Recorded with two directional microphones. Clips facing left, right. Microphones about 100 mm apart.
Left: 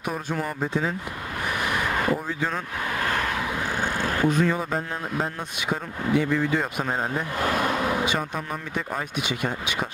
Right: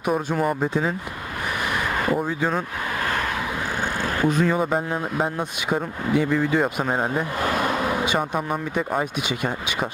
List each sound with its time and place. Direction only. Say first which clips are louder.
0.0 s speech: right 6 dB; 15° right (ahead or behind)
1.7 s a sound: right 1 dB; 20° right (ahead or behind)
3.0 s vehicle: right 1 dB; 15° right (ahead or behind)
4.3 s speech: right 5 dB; 15° right (ahead or behind)